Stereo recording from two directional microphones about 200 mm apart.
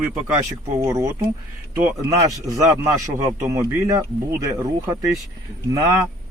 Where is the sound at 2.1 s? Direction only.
15° right (ahead or behind).